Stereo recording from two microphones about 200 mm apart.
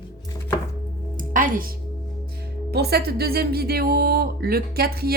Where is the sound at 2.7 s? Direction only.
55° right (ahead or behind).